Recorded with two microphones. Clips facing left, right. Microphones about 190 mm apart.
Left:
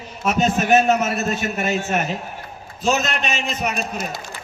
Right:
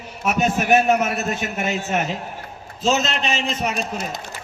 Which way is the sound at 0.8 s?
15° right (ahead or behind).